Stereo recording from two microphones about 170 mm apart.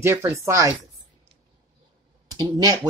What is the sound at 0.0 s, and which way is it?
Speech, 15° right (ahead or behind).